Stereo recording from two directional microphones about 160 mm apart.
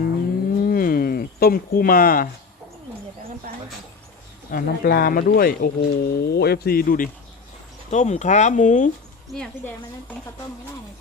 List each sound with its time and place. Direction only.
0.6 s a sound: 65° left (ahead or behind)
4.5 s speech: 65° left (ahead or behind)
7.9 s speech: 45° left (ahead or behind)
9.3 s speech: 5° left (ahead or behind)